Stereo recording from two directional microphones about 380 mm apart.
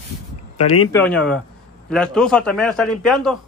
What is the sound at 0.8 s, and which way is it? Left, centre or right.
A man's voice, centre.